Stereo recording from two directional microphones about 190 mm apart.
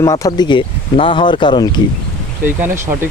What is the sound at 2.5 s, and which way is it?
Speech, 10° right (ahead or behind).